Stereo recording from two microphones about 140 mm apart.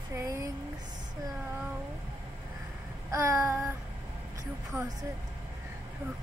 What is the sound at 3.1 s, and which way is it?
Child singing, 20° right (ahead or behind).